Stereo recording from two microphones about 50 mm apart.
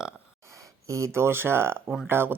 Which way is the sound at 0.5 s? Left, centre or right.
Right.